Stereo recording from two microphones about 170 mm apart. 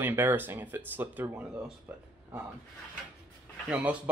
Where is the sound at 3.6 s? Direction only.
10° right (ahead or behind).